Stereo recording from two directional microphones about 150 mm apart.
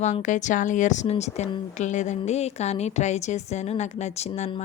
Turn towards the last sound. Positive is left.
turn(degrees=50)  # may be behind; listen again after turning